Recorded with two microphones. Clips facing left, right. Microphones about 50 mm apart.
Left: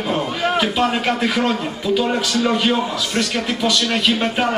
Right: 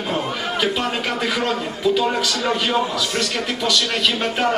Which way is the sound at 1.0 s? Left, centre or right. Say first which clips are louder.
Left 3 dB; centre.